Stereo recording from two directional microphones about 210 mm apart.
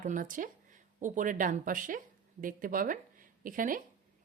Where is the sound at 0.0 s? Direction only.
40° right (ahead or behind).